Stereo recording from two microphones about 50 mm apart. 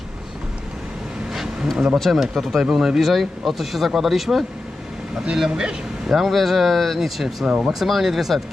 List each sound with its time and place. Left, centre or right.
2.0 s speech: centre
5.1 s speech: centre
6.1 s speech: centre